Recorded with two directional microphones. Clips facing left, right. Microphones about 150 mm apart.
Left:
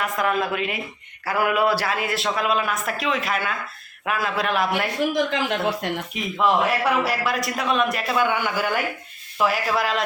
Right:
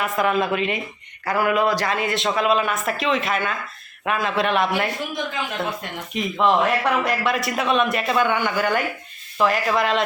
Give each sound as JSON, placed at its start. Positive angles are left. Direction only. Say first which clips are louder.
{"t": 0.0, "sound": "a man's voice", "louder": "right 2 dB", "side_deg": 0}
{"t": 5.1, "sound": "speech", "louder": "left 4 dB", "side_deg": 75}
{"t": 6.4, "sound": "a man's voice", "louder": "right 1 dB", "side_deg": 5}